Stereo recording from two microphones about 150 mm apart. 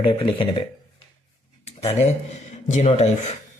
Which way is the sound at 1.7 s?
45° left (ahead or behind).